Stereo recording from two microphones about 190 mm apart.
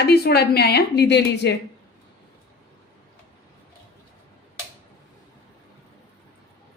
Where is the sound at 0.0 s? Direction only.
55° left (ahead or behind).